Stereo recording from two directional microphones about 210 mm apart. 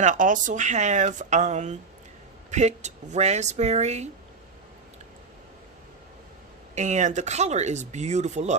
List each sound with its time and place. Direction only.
0.0 s speech: 35° right (ahead or behind)
6.7 s speech: 35° right (ahead or behind)